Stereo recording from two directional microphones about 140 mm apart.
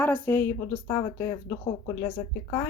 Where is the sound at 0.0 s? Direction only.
15° left (ahead or behind).